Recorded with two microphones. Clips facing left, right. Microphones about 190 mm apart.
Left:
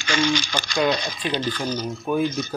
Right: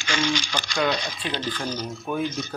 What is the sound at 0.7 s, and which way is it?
Speech, 20° left (ahead or behind).